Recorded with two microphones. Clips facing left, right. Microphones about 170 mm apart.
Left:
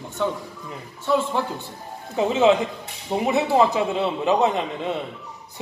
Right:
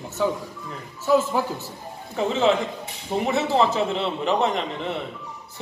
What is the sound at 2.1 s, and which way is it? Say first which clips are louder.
A man's voice: left 3 dB; 20° left (ahead or behind).